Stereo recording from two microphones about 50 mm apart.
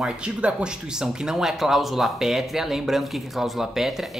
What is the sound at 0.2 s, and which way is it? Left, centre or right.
Speech, right.